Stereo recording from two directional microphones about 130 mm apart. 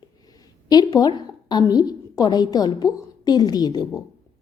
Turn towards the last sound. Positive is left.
turn(degrees=30)  # may be behind; listen again after turning